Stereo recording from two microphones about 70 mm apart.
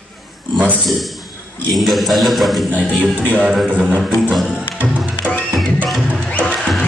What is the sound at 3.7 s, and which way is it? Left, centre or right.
Speech, right.